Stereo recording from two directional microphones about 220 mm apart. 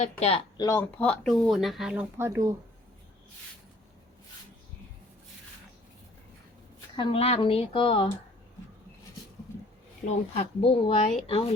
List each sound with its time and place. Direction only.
0.0 s speech: 30° left (ahead or behind)
0.5 s speech: 15° left (ahead or behind); by 2.6 s 15° right (ahead or behind)
6.9 s speech: 20° left (ahead or behind)
10.1 s speech: 30° left (ahead or behind)